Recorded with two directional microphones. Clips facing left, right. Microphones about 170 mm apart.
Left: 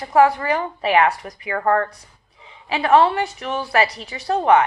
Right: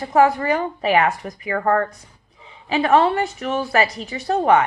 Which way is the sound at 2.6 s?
40° right (ahead or behind).